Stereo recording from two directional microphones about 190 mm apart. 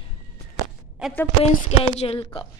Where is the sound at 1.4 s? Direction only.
30° left (ahead or behind).